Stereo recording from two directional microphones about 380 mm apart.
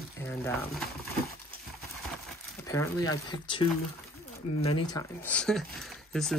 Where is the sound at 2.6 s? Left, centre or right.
Centre.